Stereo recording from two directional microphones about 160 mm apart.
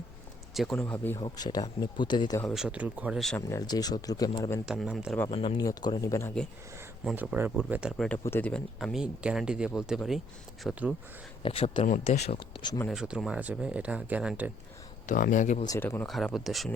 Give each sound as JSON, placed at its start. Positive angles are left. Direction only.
{"t": 0.5, "sound": "speech", "side_deg": 0}
{"t": 1.2, "sound": "speech", "side_deg": 25}
{"t": 2.5, "sound": "speech", "side_deg": -5}
{"t": 3.3, "sound": "speech", "side_deg": 20}
{"t": 4.6, "sound": "speech", "side_deg": -5}
{"t": 5.3, "sound": "speech", "side_deg": 35}
{"t": 5.5, "sound": "speech", "side_deg": 25}
{"t": 7.0, "sound": "speech", "side_deg": -5}
{"t": 8.2, "sound": "speech", "side_deg": 10}
{"t": 11.4, "sound": "speech", "side_deg": 35}
{"t": 12.9, "sound": "speech", "side_deg": -5}
{"t": 15.0, "sound": "speech", "side_deg": 55}
{"t": 15.8, "sound": "speech", "side_deg": 10}
{"t": 16.0, "sound": "speech", "side_deg": 0}